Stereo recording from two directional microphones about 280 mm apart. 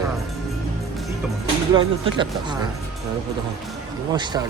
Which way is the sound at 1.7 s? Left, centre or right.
Centre.